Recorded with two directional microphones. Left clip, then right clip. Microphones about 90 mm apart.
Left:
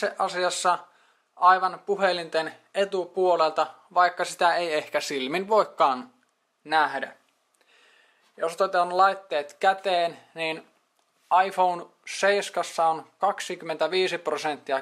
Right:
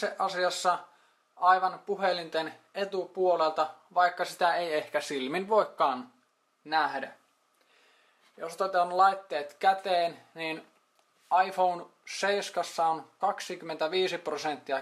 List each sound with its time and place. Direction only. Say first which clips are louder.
0.0 s speech: left 3 dB; 40° left (ahead or behind)
8.4 s speech: left 5 dB; 35° left (ahead or behind)